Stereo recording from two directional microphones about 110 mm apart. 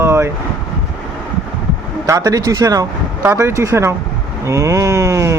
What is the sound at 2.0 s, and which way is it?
Speech, 30° right (ahead or behind).